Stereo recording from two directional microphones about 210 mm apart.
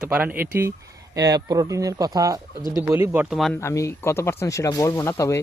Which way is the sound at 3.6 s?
15° left (ahead or behind).